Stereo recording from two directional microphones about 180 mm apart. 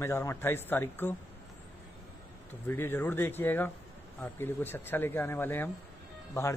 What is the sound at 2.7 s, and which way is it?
Speech, 10° left (ahead or behind).